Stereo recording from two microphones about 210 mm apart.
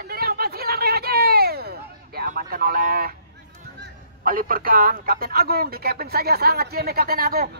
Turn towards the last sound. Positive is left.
turn(degrees=-45)  # may be behind; listen again after turning